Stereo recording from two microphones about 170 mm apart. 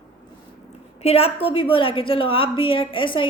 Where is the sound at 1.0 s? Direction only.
35° left (ahead or behind).